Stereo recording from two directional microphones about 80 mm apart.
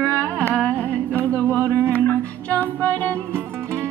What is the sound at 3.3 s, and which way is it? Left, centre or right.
Music, right.